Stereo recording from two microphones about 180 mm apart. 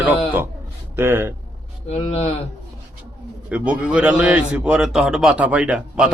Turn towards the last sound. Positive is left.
turn(degrees=-5)  # may be behind; listen again after turning